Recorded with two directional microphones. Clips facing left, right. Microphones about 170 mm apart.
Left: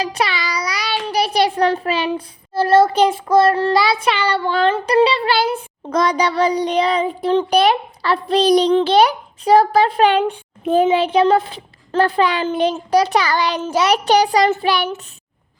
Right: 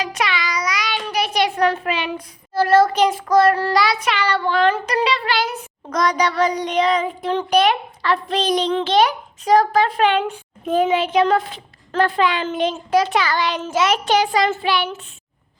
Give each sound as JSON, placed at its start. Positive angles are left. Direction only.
{"t": 0.0, "sound": "child singing", "side_deg": 35}